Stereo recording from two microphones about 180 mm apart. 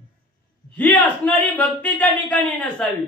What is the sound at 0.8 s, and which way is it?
Speech, 10° left (ahead or behind).